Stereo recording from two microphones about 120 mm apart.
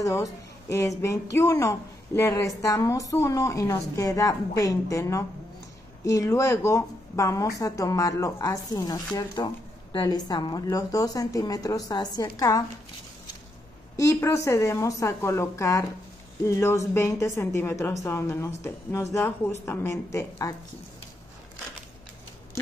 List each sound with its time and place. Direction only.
0.0 s a woman's voice: 25° left (ahead or behind)
13.9 s a woman's voice: 25° left (ahead or behind)